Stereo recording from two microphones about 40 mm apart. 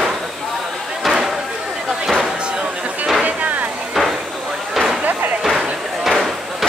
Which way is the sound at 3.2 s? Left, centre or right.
Right.